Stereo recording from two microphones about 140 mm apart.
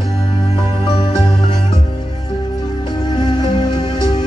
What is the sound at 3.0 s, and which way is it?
Music, 30° left (ahead or behind).